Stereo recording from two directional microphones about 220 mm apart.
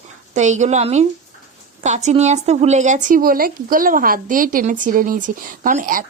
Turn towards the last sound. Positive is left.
turn(degrees=-40)  # may be behind; listen again after turning